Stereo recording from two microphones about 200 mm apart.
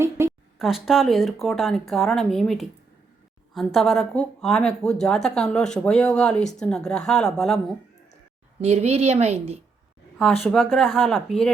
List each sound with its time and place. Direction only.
0.0 s a sound: 10° right (ahead or behind)
0.6 s speech: centre (ahead or behind)
3.8 s speech: centre (ahead or behind)
8.6 s a woman's voice: 30° right (ahead or behind)
10.4 s speech: centre (ahead or behind)